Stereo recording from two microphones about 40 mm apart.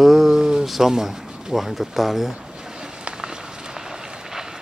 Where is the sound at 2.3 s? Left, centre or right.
Right.